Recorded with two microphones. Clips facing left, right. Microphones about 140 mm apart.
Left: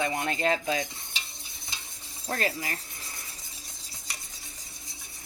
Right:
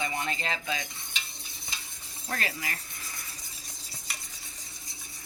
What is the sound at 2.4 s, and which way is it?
Speech, 35° left (ahead or behind).